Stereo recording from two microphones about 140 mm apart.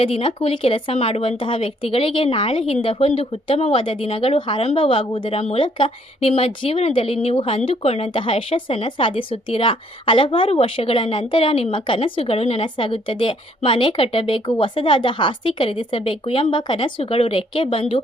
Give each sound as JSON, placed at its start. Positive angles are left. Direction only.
{"t": 0.0, "sound": "speech", "side_deg": 40}